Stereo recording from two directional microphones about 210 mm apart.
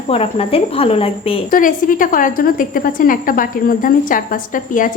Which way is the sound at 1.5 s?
40° left (ahead or behind).